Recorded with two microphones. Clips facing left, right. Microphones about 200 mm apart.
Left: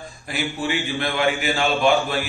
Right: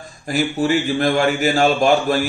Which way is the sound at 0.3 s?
45° right (ahead or behind).